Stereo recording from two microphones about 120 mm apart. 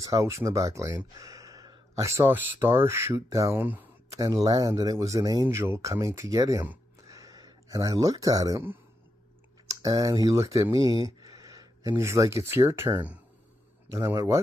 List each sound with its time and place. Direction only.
0.0 s speech: 25° right (ahead or behind)
7.1 s a sound: 30° right (ahead or behind)
9.7 s speech: 30° right (ahead or behind)
11.1 s a sound: 30° right (ahead or behind)
12.4 s speech: 20° right (ahead or behind)
14.1 s speech: 25° right (ahead or behind)